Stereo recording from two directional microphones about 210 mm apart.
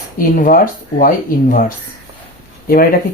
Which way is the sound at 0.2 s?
40° left (ahead or behind).